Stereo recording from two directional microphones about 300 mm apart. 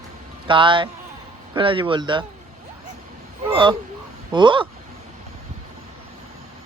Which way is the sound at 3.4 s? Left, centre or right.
Centre.